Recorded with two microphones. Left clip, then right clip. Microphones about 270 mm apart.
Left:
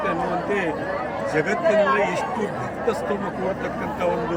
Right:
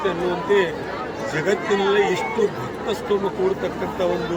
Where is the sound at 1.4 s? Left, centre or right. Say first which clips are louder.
Left 1 dB; centre.